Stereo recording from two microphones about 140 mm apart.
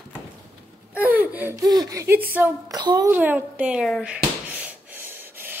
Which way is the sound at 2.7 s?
30° right (ahead or behind).